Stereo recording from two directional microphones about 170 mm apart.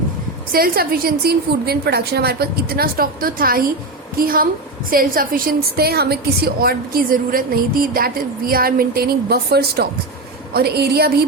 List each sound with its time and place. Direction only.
0.5 s a woman's voice: 60° right (ahead or behind)